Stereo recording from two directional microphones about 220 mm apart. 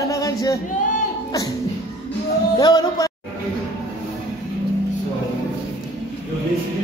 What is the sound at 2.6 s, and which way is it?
Music, 20° left (ahead or behind).